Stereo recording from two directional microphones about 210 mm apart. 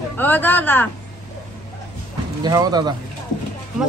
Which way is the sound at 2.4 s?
20° right (ahead or behind).